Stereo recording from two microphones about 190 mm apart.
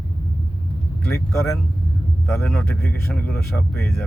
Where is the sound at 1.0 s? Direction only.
15° left (ahead or behind).